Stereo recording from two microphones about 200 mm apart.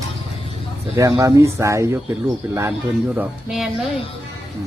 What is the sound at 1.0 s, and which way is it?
Speech, 15° right (ahead or behind).